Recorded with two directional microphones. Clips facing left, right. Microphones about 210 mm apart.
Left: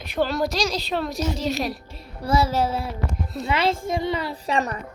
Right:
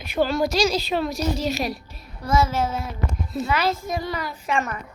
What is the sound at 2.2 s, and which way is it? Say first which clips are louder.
A woman's voice: left 1 dB; 35° left (ahead or behind).